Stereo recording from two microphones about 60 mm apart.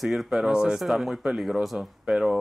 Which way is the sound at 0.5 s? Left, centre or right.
Centre.